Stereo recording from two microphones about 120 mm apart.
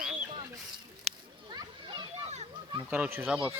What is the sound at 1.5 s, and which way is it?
Children playing, 35° right (ahead or behind).